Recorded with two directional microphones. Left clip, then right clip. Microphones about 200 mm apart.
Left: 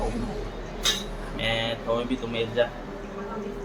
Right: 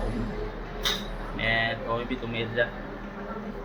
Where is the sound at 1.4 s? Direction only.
20° left (ahead or behind).